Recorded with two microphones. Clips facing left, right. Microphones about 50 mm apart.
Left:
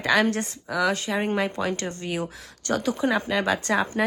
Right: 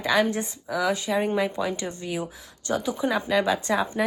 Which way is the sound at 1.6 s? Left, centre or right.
Centre.